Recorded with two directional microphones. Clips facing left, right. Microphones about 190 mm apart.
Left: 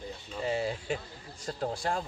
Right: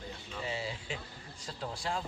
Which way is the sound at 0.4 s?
50° left (ahead or behind).